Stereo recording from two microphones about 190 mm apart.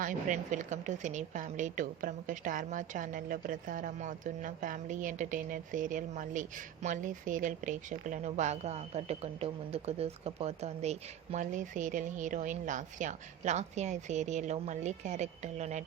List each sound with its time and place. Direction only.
0.0 s a woman's voice: 40° right (ahead or behind)